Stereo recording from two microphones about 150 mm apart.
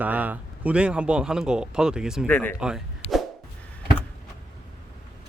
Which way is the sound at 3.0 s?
45° left (ahead or behind).